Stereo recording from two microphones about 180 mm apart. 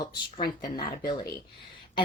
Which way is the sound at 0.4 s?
25° left (ahead or behind).